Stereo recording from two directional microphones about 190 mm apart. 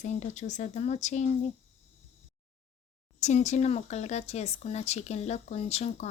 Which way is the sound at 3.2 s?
40° left (ahead or behind).